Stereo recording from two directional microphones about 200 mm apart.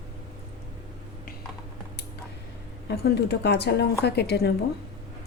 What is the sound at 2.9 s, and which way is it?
A woman's voice, 55° left (ahead or behind).